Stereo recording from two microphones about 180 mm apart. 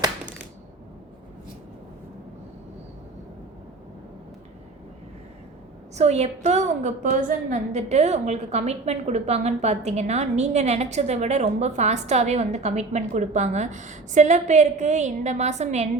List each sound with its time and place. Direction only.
6.0 s a woman's voice: 35° right (ahead or behind)